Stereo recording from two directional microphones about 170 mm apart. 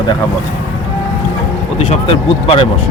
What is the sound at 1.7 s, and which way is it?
Speech, 35° left (ahead or behind).